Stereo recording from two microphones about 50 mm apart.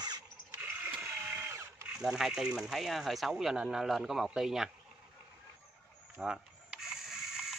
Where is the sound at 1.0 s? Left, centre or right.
Right.